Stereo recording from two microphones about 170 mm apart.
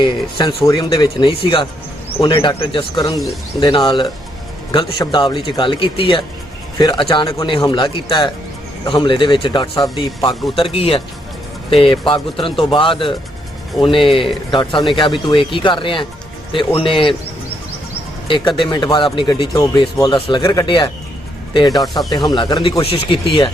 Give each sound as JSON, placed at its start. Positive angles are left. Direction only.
{"t": 0.0, "sound": "speech", "side_deg": 25}
{"t": 18.3, "sound": "speech", "side_deg": 30}
{"t": 21.9, "sound": "speech", "side_deg": 25}